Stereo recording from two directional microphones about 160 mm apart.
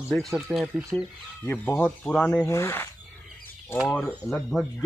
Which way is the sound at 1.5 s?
15° left (ahead or behind).